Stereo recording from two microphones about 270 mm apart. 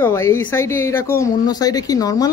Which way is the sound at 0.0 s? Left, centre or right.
Centre.